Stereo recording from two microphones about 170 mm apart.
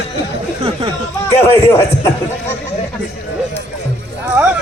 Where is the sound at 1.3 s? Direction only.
15° left (ahead or behind).